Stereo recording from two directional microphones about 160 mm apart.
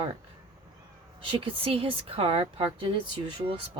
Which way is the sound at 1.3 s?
35° right (ahead or behind).